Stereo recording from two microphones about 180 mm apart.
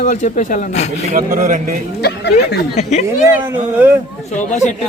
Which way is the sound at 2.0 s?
65° left (ahead or behind).